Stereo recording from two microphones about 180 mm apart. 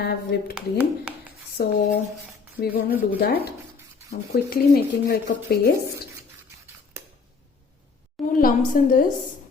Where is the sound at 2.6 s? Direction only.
60° left (ahead or behind).